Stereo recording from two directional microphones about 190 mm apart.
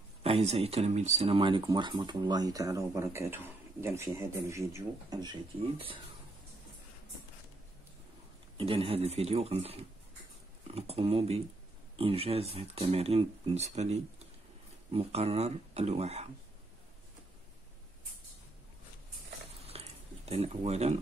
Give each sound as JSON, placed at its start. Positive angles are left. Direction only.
{"t": 0.2, "sound": "speech", "side_deg": -30}
{"t": 8.5, "sound": "speech", "side_deg": -30}
{"t": 19.6, "sound": "a sound", "side_deg": -35}